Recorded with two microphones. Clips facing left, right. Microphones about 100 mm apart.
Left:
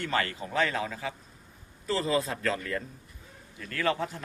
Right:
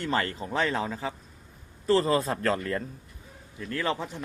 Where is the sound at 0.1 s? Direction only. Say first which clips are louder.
Right 2 dB; 35° right (ahead or behind).